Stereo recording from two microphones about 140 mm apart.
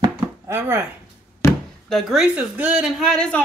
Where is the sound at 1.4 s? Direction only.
20° left (ahead or behind).